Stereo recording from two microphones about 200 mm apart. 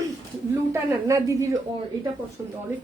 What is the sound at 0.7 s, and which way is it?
Speech, 15° right (ahead or behind).